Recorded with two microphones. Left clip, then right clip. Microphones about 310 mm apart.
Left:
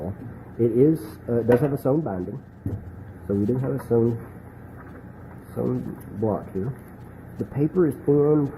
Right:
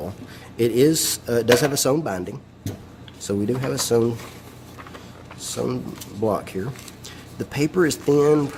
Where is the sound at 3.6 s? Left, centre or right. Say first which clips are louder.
Right 5 dB; right.